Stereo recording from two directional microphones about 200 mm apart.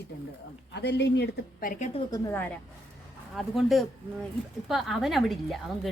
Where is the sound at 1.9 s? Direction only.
20° left (ahead or behind).